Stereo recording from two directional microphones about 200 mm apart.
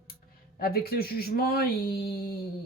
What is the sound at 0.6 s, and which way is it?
Speech, 50° left (ahead or behind).